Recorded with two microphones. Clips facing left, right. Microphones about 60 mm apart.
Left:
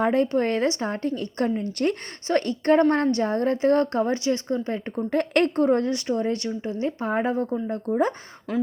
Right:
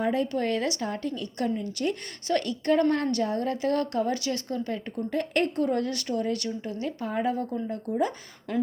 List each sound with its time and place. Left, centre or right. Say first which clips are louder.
0.0 s a woman's voice: left 5 dB; left
0.3 s speech: left 5 dB; left
5.1 s a woman's voice: left 5 dB; left
5.6 s speech: left 6 dB; left
8.5 s speech: left 2 dB; centre